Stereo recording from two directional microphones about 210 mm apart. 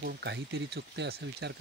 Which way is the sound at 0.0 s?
50° right (ahead or behind).